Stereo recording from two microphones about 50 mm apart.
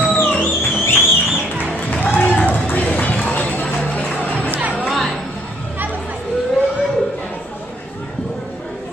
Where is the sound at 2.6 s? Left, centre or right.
Left.